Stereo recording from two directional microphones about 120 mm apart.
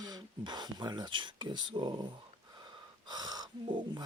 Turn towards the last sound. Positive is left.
turn(degrees=-40)  # may be behind; listen again after turning